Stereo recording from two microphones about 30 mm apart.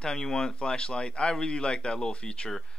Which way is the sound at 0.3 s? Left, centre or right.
Left.